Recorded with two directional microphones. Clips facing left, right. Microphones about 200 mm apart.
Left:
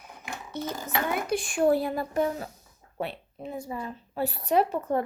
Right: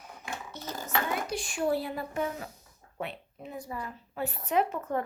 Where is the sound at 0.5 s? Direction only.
55° left (ahead or behind).